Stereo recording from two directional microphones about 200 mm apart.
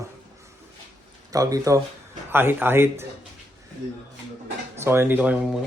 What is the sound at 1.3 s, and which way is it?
Speech, 15° right (ahead or behind).